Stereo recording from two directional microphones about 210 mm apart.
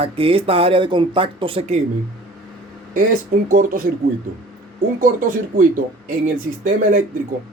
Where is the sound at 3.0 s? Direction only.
40° right (ahead or behind).